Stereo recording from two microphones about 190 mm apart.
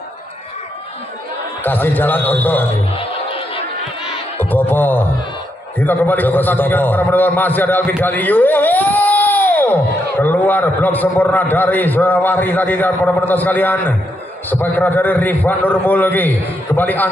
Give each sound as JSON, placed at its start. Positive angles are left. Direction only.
{"t": 1.6, "sound": "a man's voice", "side_deg": 10}
{"t": 3.0, "sound": "music", "side_deg": 30}
{"t": 4.4, "sound": "a man's voice", "side_deg": 10}